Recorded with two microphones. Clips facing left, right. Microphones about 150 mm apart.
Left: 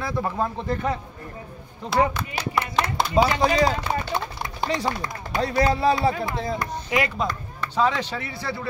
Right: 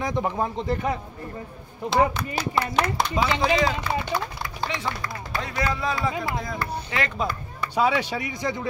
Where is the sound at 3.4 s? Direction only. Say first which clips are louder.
Left 2 dB; 40° left (ahead or behind).